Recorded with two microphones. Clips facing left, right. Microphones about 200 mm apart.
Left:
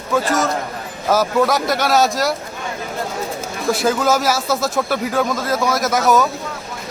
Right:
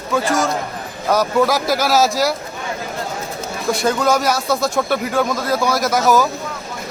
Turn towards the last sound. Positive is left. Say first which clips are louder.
# even
turn(degrees=0)  # may be behind; listen again after turning